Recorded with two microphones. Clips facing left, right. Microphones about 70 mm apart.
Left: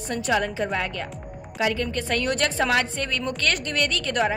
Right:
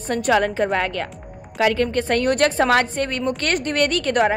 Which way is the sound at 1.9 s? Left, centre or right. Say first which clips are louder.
Right 6 dB; right.